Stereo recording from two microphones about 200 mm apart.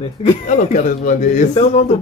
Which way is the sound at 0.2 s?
35° left (ahead or behind).